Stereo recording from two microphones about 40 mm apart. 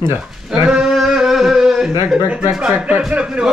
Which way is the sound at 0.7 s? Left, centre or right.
Centre.